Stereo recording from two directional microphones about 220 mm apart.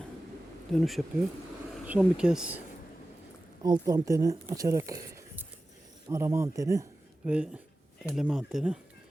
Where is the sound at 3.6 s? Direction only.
20° right (ahead or behind).